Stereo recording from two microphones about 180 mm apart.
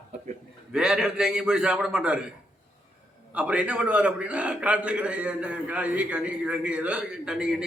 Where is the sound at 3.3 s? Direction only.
5° right (ahead or behind).